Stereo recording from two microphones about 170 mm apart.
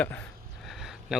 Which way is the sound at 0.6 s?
Centre (ahead or behind).